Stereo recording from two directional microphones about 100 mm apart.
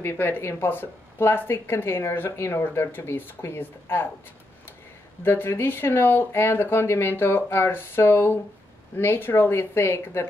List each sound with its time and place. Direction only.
0.0 s speech: 25° left (ahead or behind)
5.2 s speech: 25° left (ahead or behind)